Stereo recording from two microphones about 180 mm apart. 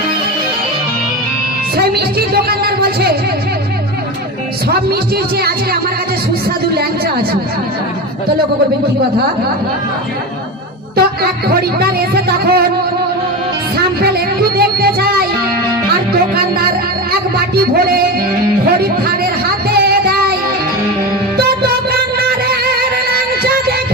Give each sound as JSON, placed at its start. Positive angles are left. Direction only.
{"t": 1.7, "sound": "speech", "side_deg": -60}
{"t": 4.7, "sound": "speech", "side_deg": -60}
{"t": 10.9, "sound": "speech", "side_deg": -60}
{"t": 13.7, "sound": "music", "side_deg": -60}
{"t": 17.1, "sound": "a sound", "side_deg": -60}
{"t": 21.3, "sound": "music", "side_deg": -60}